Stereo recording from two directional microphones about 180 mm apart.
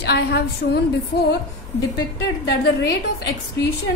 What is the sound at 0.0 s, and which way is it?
Speech, 65° left (ahead or behind).